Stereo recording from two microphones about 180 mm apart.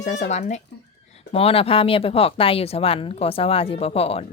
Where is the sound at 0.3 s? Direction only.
40° left (ahead or behind).